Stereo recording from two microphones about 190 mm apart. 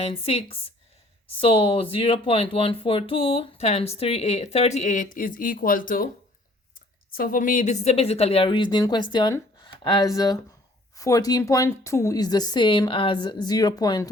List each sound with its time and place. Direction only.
0.0 s speech: 30° left (ahead or behind)